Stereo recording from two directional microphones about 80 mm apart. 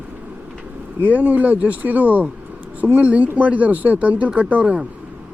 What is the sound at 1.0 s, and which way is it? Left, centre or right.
Speech, centre.